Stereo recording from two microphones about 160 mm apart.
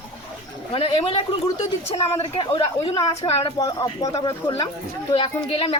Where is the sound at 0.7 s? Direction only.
40° left (ahead or behind); by 4.2 s 20° left (ahead or behind).